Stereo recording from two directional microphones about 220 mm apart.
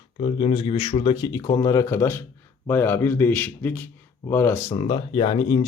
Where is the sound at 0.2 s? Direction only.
25° left (ahead or behind); by 4.6 s 10° left (ahead or behind).